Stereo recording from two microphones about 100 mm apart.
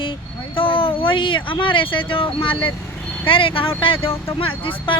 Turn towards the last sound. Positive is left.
turn(degrees=60)  # may be behind; listen again after turning